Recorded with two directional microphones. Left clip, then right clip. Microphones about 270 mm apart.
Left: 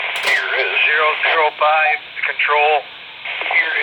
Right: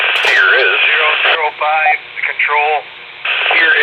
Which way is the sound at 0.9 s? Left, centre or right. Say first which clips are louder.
Right 4 dB; left.